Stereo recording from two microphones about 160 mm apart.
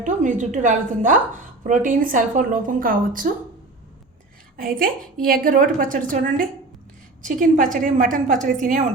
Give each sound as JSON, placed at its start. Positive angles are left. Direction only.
{"t": 0.0, "sound": "a woman's voice", "side_deg": -55}
{"t": 4.5, "sound": "a woman's voice", "side_deg": -60}